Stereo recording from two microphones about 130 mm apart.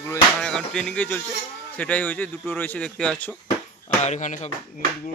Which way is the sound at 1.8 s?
10° left (ahead or behind).